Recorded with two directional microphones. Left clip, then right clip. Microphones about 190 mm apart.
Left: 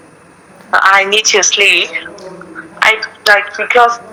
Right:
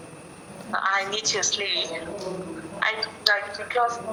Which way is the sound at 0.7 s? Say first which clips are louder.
Left 16 dB; 40° left (ahead or behind).